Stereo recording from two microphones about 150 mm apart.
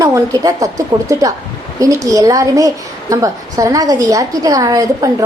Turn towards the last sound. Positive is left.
turn(degrees=-20)  # may be behind; listen again after turning